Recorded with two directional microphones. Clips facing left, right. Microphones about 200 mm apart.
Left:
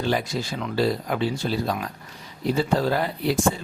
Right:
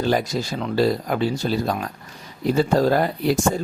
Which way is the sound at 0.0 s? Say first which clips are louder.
Right 4 dB; 40° right (ahead or behind).